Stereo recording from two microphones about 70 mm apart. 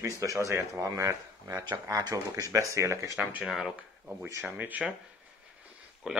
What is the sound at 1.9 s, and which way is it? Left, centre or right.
Speech, right.